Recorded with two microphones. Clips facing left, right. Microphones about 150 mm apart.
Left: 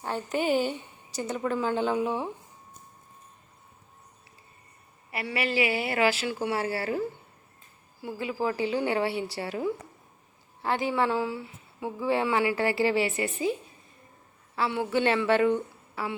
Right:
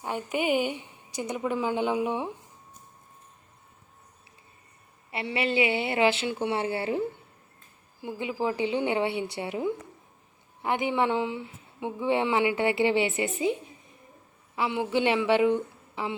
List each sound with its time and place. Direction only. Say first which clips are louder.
0.0 s a woman's voice: even; 10° right (ahead or behind)
5.1 s speech: right 2 dB; 25° right (ahead or behind)